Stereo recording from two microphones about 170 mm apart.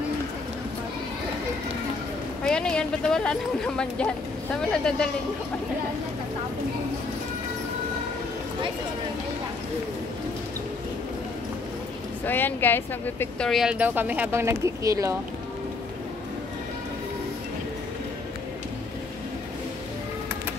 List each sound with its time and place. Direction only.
2.4 s speech: 5° left (ahead or behind)
12.3 s speech: 10° left (ahead or behind); by 15.1 s 20° right (ahead or behind)